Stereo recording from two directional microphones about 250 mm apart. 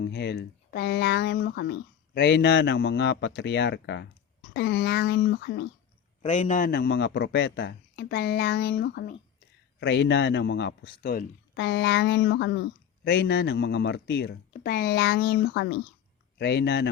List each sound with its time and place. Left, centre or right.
0.0 s a man's voice: left
6.2 s a man's voice: left